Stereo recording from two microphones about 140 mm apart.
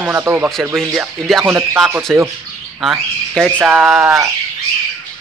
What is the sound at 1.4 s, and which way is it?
Speech, 20° right (ahead or behind).